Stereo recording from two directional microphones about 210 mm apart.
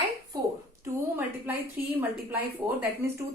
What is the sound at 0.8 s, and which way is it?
Speech, 10° right (ahead or behind).